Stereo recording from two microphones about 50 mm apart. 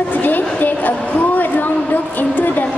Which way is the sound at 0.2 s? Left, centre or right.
Left.